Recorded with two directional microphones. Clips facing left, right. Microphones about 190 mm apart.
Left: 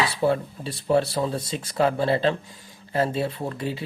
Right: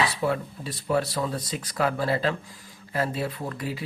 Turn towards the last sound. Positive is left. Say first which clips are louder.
# left 3 dB
turn(degrees=25)  # may be behind; listen again after turning